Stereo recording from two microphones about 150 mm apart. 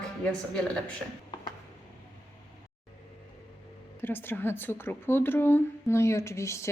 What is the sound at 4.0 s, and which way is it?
A woman's voice, 15° left (ahead or behind).